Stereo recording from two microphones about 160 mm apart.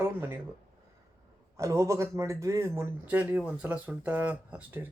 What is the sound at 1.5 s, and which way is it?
Speech, 20° right (ahead or behind).